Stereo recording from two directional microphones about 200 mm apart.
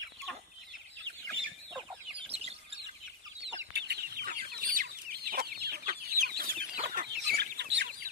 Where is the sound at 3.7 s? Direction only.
55° right (ahead or behind).